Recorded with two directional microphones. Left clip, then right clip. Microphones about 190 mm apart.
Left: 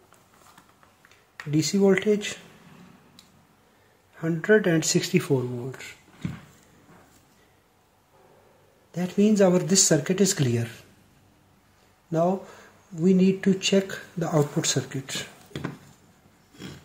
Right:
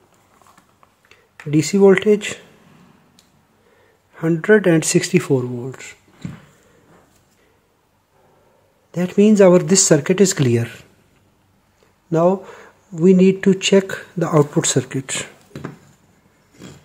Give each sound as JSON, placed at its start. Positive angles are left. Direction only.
{"t": 1.0, "sound": "speech", "side_deg": -45}
{"t": 4.1, "sound": "speech", "side_deg": -40}
{"t": 8.9, "sound": "speech", "side_deg": -45}
{"t": 12.1, "sound": "speech", "side_deg": -45}